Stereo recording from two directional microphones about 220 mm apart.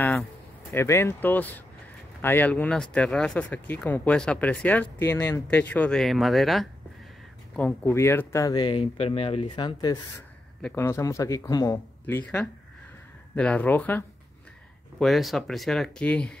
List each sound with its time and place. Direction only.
0.7 s speech: 10° left (ahead or behind)